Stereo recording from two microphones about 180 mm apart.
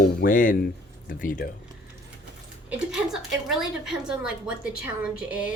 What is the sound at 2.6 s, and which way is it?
A woman's voice, 5° right (ahead or behind).